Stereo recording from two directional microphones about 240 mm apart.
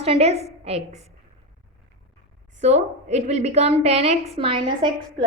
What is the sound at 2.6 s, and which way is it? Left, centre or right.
A woman's voice, right.